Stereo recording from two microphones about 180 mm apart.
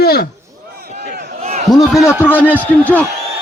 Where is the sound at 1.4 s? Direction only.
40° right (ahead or behind).